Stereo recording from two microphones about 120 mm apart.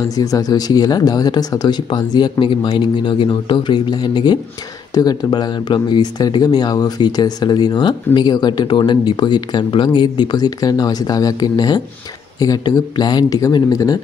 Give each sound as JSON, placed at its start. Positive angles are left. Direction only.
{"t": 0.1, "sound": "speech", "side_deg": 30}